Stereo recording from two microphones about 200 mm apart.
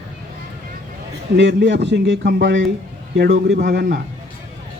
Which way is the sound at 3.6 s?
45° right (ahead or behind).